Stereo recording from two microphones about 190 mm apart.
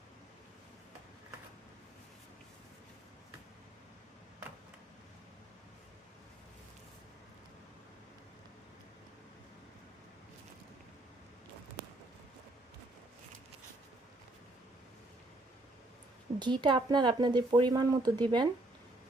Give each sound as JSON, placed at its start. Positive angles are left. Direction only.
{"t": 16.4, "sound": "a woman's voice", "side_deg": -25}